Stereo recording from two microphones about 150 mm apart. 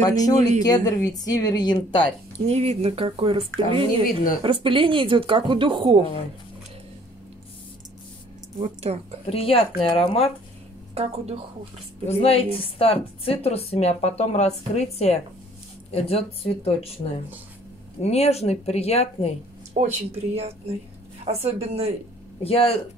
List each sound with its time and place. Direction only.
0.0 s speech: 25° left (ahead or behind)
2.3 s speech: 45° right (ahead or behind)
8.6 s speech: 45° right (ahead or behind)
9.2 s speech: 40° left (ahead or behind)
11.0 s speech: 45° right (ahead or behind)
12.1 s a woman's voice: 40° left (ahead or behind)
18.0 s a woman's voice: 45° left (ahead or behind)
19.7 s speech: 45° right (ahead or behind)
22.4 s speech: 40° left (ahead or behind)